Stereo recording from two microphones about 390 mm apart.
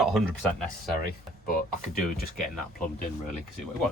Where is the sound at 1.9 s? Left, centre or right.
Left.